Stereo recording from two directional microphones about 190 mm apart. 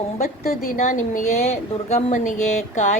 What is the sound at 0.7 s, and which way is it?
Speech, 40° left (ahead or behind).